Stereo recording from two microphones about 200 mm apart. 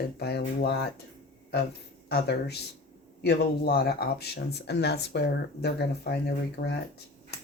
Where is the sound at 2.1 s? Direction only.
55° left (ahead or behind).